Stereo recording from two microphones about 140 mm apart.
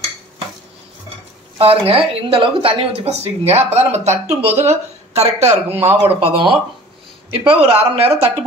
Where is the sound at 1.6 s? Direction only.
40° right (ahead or behind).